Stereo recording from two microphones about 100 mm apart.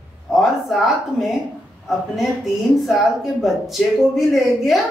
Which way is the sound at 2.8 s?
Centre (ahead or behind).